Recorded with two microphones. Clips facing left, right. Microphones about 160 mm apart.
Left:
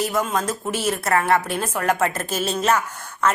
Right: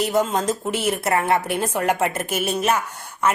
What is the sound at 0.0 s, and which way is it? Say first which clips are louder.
A woman's voice: right 2 dB; 25° right (ahead or behind).